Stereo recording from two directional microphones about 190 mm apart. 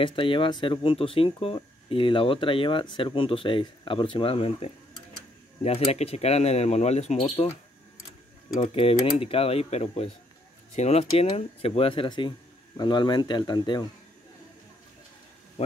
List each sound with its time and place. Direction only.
0.0 s speech: 25° left (ahead or behind)
8.5 s speech: 30° left (ahead or behind)